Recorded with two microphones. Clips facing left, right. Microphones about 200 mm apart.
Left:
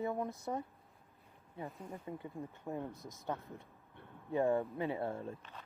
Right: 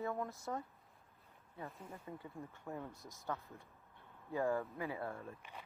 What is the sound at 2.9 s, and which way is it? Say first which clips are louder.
Speech: left 5 dB; centre (ahead or behind).